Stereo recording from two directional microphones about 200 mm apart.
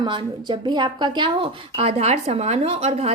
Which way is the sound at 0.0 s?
25° right (ahead or behind).